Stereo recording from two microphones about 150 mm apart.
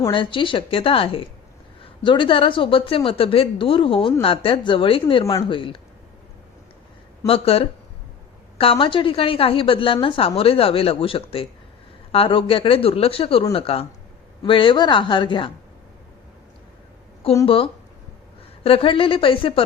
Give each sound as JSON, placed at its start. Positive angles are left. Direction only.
{"t": 0.1, "sound": "a woman's voice", "side_deg": 35}
{"t": 7.3, "sound": "a woman's voice", "side_deg": 40}
{"t": 17.4, "sound": "a woman's voice", "side_deg": 35}